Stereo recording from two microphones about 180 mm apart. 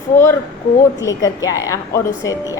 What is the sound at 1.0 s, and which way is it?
A woman's voice, 20° left (ahead or behind).